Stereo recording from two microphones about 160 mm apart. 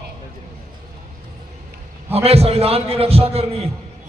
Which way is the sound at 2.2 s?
40° right (ahead or behind).